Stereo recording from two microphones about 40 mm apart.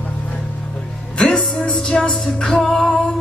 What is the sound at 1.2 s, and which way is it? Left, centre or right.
Music, centre.